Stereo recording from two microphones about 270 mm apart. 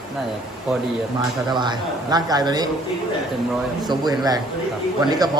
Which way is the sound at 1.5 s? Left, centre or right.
Centre.